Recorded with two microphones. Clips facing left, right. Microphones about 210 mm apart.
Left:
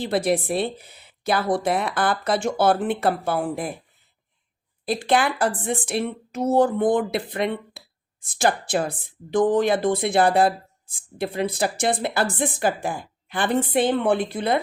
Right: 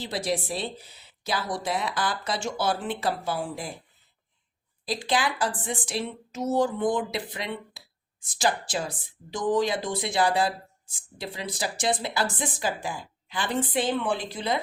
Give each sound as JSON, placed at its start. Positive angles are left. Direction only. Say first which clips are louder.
{"t": 0.0, "sound": "a woman's voice", "louder": "left 7 dB", "side_deg": 55}
{"t": 4.9, "sound": "a woman's voice", "louder": "left 6 dB", "side_deg": 55}